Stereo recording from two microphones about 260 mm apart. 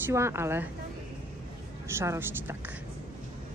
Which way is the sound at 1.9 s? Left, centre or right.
Centre.